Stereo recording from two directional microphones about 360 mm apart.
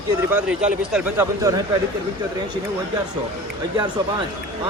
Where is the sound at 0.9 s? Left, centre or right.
Centre.